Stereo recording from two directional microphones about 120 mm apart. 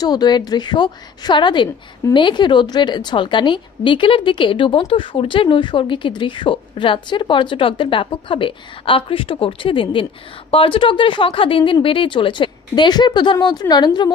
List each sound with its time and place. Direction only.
0.0 s a woman's voice: 35° left (ahead or behind)